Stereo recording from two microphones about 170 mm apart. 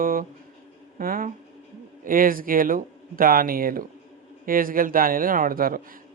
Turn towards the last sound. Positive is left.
turn(degrees=-55)  # may be behind; listen again after turning